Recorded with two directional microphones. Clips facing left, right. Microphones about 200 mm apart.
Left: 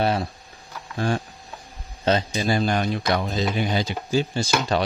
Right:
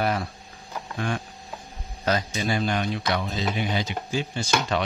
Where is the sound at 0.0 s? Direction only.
30° left (ahead or behind).